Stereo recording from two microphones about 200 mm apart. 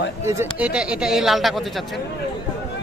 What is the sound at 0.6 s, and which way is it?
Speech, 5° right (ahead or behind).